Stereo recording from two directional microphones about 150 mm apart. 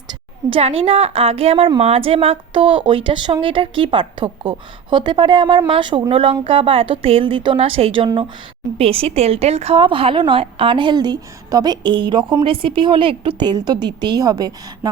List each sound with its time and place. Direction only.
0.1 s a woman's voice: 40° right (ahead or behind)